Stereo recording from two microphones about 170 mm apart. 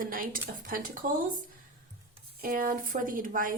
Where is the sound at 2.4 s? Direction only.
55° right (ahead or behind).